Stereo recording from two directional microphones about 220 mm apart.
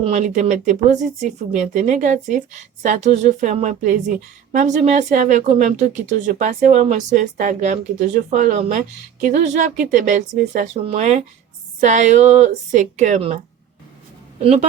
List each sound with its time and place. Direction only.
0.0 s a woman's voice: 30° right (ahead or behind)